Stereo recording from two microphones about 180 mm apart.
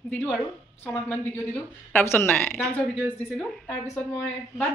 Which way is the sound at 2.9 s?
5° right (ahead or behind).